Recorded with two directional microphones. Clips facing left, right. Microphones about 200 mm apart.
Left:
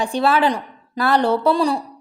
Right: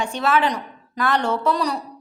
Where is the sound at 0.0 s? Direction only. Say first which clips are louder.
Left 3 dB; 35° left (ahead or behind).